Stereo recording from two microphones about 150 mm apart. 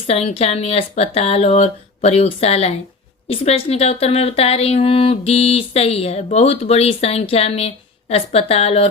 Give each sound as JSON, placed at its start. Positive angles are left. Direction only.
{"t": 0.1, "sound": "a woman's voice", "side_deg": 45}